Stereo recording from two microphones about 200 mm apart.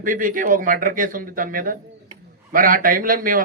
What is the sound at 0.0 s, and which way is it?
A man's voice, 40° right (ahead or behind).